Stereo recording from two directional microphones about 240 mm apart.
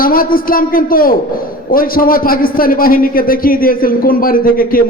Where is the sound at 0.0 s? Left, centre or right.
Left.